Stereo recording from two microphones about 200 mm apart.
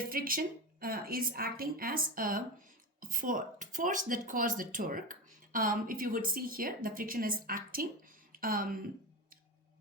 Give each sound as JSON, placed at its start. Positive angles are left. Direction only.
{"t": 0.1, "sound": "speech", "side_deg": -45}